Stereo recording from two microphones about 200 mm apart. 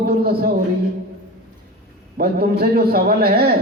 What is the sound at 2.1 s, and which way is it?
A man's voice, 50° right (ahead or behind).